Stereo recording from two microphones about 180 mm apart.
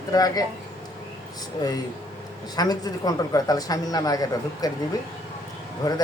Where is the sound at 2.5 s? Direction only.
20° left (ahead or behind).